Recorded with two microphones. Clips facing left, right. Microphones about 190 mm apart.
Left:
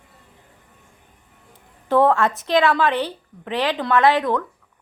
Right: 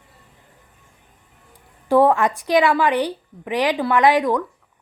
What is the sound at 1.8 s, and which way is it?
A woman's voice, 10° right (ahead or behind).